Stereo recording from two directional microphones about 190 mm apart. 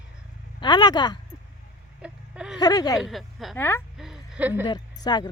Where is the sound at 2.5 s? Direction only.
20° left (ahead or behind).